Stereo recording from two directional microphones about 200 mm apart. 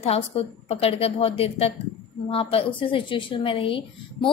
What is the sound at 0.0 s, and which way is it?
A woman's voice, 30° left (ahead or behind).